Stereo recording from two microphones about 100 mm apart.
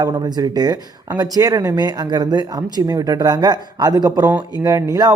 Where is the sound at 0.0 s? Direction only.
45° right (ahead or behind).